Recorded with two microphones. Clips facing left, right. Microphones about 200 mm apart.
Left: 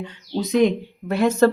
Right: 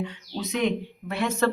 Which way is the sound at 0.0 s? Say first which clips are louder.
Left 5 dB; 35° left (ahead or behind).